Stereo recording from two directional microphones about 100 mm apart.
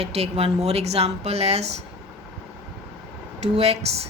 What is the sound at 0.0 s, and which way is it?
A woman's voice, 90° right.